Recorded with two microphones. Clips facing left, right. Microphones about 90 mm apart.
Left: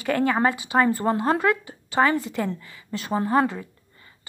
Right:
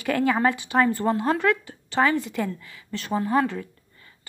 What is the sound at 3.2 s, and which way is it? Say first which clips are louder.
Speech: left 2 dB; 20° left (ahead or behind).